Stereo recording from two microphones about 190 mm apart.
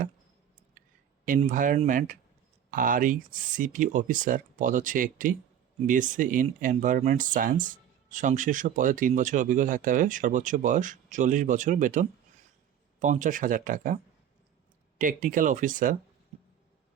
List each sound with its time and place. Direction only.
1.2 s speech: 45° right (ahead or behind)